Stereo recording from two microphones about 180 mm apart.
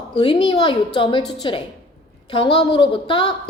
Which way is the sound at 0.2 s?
25° left (ahead or behind).